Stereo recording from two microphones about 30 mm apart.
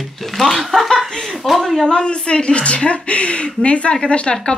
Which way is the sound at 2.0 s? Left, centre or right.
Left.